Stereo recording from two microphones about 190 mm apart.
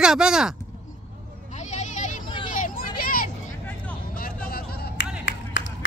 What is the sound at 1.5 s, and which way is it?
Vehicle, 40° left (ahead or behind).